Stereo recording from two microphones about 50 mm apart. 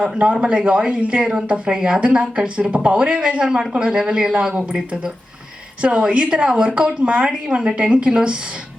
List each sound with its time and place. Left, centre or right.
0.0 s speech: right
5.8 s speech: right